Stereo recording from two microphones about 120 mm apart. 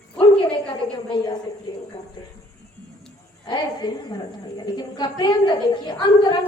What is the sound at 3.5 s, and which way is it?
A woman's voice, 35° left (ahead or behind).